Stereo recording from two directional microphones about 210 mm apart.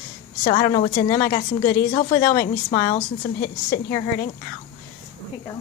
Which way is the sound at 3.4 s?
45° left (ahead or behind).